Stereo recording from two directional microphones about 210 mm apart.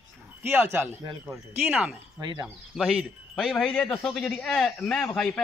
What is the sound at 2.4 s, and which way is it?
A man's voice, 5° right (ahead or behind).